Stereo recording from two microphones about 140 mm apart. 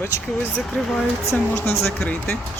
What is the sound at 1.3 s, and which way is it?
Speech, 15° left (ahead or behind).